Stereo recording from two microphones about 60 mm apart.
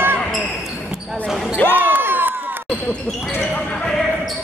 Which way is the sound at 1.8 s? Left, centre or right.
Right.